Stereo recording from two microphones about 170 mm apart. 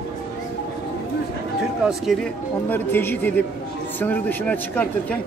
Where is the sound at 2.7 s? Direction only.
10° left (ahead or behind).